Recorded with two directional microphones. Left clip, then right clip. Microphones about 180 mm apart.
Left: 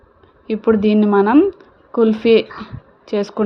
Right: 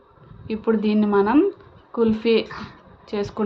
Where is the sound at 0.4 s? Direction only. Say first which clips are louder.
Left 7 dB; 30° left (ahead or behind).